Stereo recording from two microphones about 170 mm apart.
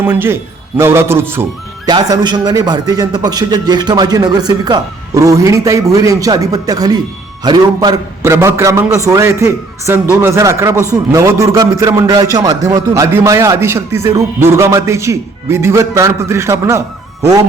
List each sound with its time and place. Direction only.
0.0 s a man's voice: 15° right (ahead or behind)
1.9 s a man's voice: 25° right (ahead or behind)